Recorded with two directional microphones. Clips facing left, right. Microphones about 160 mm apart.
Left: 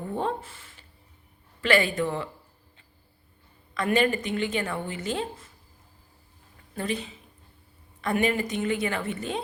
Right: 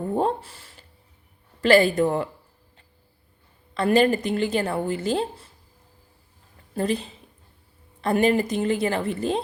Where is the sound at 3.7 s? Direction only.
35° right (ahead or behind).